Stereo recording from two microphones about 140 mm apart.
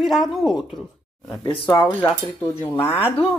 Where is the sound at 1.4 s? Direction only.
35° left (ahead or behind).